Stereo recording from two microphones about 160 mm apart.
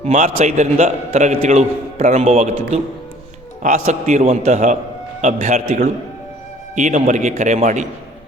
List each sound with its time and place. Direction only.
0.0 s a man's voice: 45° right (ahead or behind)